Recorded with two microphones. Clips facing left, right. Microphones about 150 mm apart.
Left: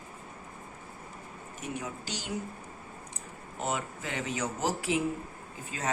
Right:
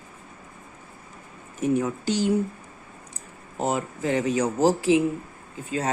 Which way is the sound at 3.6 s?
35° right (ahead or behind).